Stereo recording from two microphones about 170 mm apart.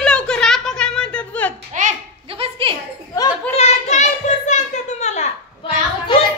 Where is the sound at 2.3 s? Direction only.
35° right (ahead or behind).